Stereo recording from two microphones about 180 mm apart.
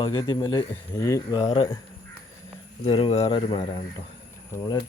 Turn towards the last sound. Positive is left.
turn(degrees=20)  # may be behind; listen again after turning